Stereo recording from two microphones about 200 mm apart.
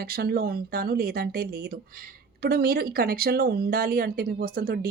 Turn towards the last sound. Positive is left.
turn(degrees=-50)  # may be behind; listen again after turning